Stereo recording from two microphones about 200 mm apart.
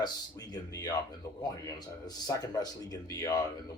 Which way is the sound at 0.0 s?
20° left (ahead or behind).